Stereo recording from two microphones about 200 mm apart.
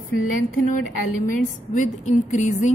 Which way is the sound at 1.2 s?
40° left (ahead or behind).